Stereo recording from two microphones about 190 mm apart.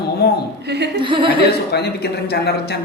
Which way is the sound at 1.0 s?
25° right (ahead or behind).